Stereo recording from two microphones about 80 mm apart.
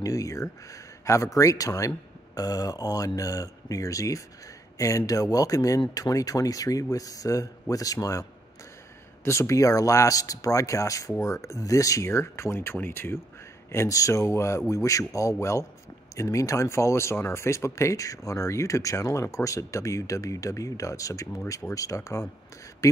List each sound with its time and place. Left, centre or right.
0.0 s speech: left
9.2 s speech: left
13.7 s speech: left